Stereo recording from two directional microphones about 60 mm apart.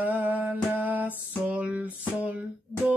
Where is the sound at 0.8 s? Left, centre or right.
Right.